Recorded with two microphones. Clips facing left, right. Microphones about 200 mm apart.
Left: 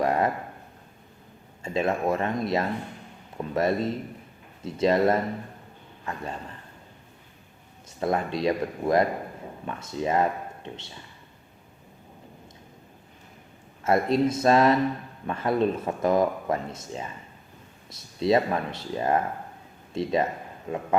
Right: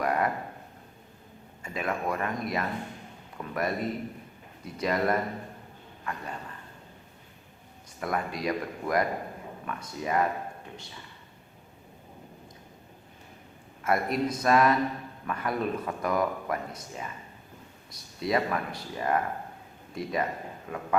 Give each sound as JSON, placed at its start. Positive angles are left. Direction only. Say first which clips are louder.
{"t": 0.0, "sound": "a sound", "louder": "left 4 dB", "side_deg": 25}
{"t": 1.6, "sound": "speech", "louder": "left 6 dB", "side_deg": 25}
{"t": 7.9, "sound": "speech", "louder": "left 5 dB", "side_deg": 25}
{"t": 13.8, "sound": "speech", "louder": "left 5 dB", "side_deg": 25}